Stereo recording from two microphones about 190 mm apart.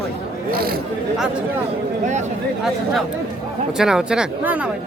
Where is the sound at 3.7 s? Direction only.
5° right (ahead or behind).